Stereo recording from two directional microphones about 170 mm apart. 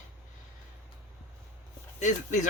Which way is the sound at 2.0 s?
45° left (ahead or behind).